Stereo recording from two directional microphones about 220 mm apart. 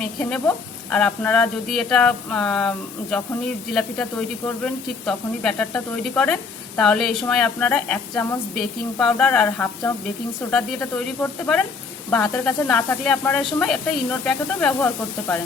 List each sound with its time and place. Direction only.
0.0 s speech: 5° left (ahead or behind)